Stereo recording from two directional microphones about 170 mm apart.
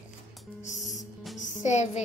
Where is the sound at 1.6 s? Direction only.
40° left (ahead or behind).